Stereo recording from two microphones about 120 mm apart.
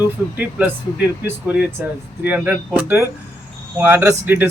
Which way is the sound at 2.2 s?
15° right (ahead or behind).